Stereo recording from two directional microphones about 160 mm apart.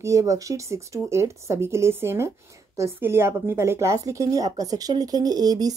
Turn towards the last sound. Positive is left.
turn(degrees=-25)  # may be behind; listen again after turning